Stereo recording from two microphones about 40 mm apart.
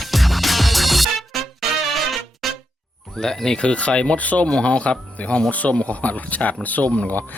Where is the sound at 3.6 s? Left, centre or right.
Left.